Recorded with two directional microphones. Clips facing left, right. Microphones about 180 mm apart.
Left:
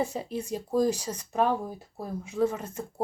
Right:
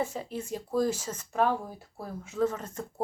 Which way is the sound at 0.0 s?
15° left (ahead or behind).